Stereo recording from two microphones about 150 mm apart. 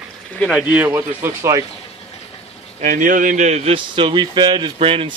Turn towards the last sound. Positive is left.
turn(degrees=-40)  # may be behind; listen again after turning